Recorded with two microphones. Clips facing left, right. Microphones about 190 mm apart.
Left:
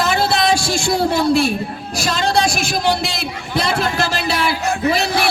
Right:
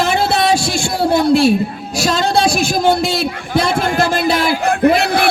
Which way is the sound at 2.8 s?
50° right (ahead or behind).